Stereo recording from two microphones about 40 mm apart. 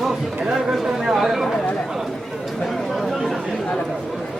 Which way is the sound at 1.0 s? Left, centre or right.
Centre.